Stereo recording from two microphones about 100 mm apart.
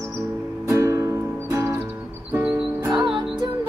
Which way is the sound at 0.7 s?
30° right (ahead or behind).